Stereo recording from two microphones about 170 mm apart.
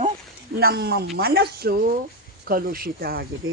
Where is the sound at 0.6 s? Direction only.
70° right (ahead or behind).